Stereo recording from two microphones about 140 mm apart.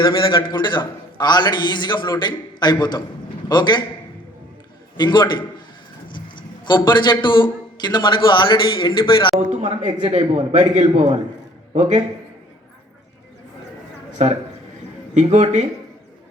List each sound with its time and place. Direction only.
0.0 s a man's voice: 35° left (ahead or behind)
4.9 s a man's voice: 30° left (ahead or behind)
9.5 s a man's voice: 55° right (ahead or behind)
15.1 s a man's voice: 55° right (ahead or behind)